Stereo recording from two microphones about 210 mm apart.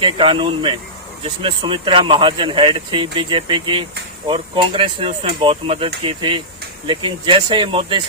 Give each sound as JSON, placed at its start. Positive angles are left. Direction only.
{"t": 0.0, "sound": "speech", "side_deg": -25}